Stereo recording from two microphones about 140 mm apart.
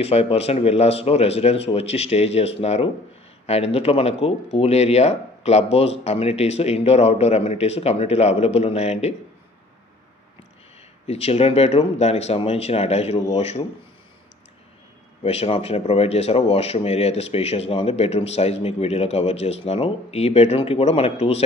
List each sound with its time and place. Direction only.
0.0 s speech: 45° left (ahead or behind)
11.1 s speech: 45° left (ahead or behind)
15.2 s speech: 45° left (ahead or behind)